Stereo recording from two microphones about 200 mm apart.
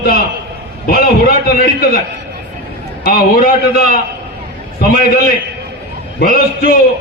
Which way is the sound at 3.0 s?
45° left (ahead or behind).